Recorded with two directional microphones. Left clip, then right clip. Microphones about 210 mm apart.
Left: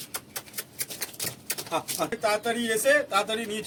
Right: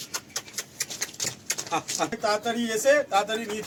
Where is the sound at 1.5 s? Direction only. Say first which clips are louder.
Right 1 dB; 45° left (ahead or behind).